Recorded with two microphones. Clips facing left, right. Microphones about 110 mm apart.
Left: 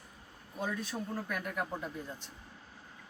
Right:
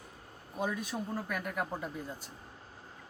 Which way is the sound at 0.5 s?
15° right (ahead or behind).